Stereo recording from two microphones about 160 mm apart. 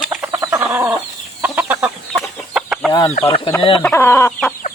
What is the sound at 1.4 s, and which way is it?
Chicken, 10° right (ahead or behind).